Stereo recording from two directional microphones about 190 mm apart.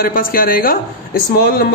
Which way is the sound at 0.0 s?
50° left (ahead or behind).